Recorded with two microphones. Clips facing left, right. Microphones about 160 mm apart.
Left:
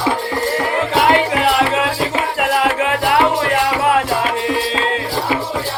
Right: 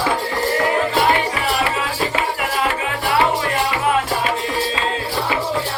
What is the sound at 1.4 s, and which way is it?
Music, 70° left (ahead or behind).